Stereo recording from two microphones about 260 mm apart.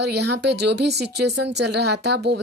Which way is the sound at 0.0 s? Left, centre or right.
Right.